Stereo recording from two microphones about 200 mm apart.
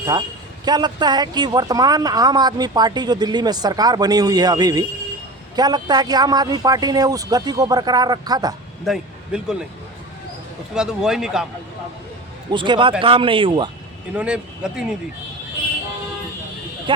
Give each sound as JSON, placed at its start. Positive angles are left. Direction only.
{"t": 0.0, "sound": "speech", "side_deg": -20}
{"t": 8.8, "sound": "speech", "side_deg": 0}
{"t": 10.8, "sound": "speech", "side_deg": -5}
{"t": 12.5, "sound": "speech", "side_deg": -25}
{"t": 14.1, "sound": "speech", "side_deg": -5}